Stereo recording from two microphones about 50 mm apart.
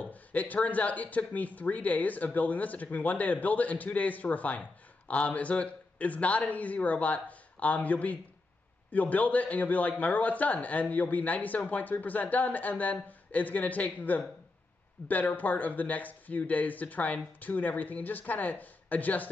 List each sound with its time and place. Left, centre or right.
0.0 s speech: left